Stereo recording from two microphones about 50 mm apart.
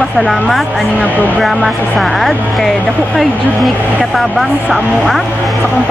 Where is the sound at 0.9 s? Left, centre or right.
Right.